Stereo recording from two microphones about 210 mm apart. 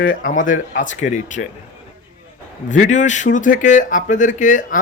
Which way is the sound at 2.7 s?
35° left (ahead or behind).